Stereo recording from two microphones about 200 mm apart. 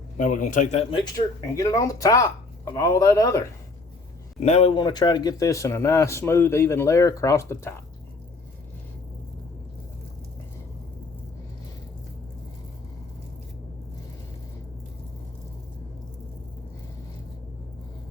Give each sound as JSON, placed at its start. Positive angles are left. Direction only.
{"t": 0.2, "sound": "a man's voice", "side_deg": 40}
{"t": 1.0, "sound": "speech", "side_deg": 20}
{"t": 4.4, "sound": "speech", "side_deg": 30}